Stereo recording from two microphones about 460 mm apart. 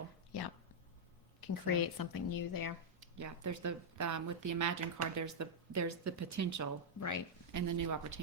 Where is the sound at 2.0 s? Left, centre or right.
Left.